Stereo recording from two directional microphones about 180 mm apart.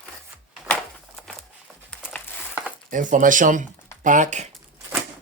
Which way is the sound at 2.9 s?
45° right (ahead or behind).